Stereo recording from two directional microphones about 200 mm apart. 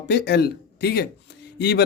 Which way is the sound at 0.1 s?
55° left (ahead or behind).